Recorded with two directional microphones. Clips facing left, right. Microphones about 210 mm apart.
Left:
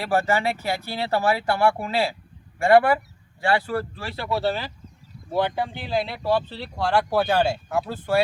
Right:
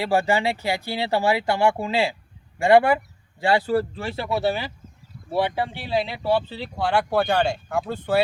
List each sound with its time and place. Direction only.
0.0 s speech: 15° right (ahead or behind)
4.4 s speech: 10° right (ahead or behind)